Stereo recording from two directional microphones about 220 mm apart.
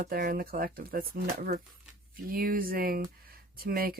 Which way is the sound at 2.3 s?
40° right (ahead or behind).